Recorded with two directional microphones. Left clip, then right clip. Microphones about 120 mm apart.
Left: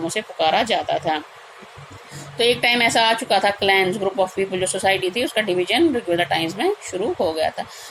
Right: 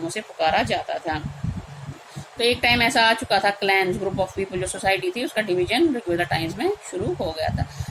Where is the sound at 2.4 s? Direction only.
35° left (ahead or behind).